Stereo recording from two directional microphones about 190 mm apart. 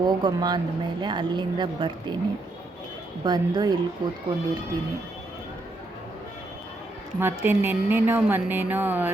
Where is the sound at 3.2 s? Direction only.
20° right (ahead or behind).